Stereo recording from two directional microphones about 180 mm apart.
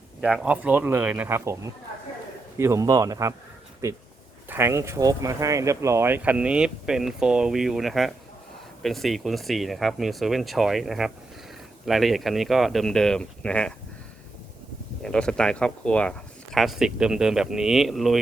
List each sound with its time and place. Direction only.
0.2 s speech: 5° right (ahead or behind)
4.4 s speech: 10° right (ahead or behind); by 13.7 s 5° left (ahead or behind)
15.0 s speech: 5° left (ahead or behind)